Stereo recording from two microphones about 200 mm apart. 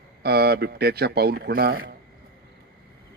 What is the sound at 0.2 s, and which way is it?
A man's voice, 55° right (ahead or behind).